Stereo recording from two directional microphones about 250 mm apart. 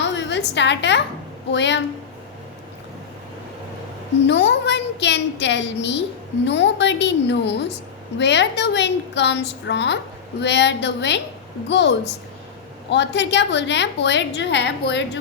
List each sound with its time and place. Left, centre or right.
0.0 s a sound: left
1.5 s a woman's voice: left
4.3 s a woman's voice: left